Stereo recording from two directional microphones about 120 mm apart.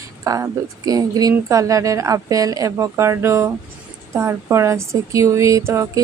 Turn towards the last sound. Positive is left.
turn(degrees=-25)  # may be behind; listen again after turning